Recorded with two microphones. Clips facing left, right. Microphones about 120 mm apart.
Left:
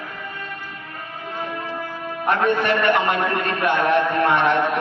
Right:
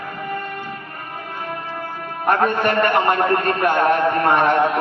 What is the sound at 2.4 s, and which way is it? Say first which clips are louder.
Speech: even; 45° right (ahead or behind).